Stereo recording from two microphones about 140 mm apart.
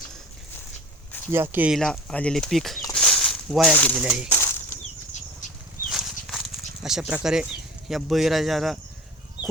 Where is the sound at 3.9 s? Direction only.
5° right (ahead or behind).